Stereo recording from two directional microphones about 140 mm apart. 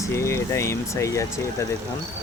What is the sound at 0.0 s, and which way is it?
Speech, 20° left (ahead or behind).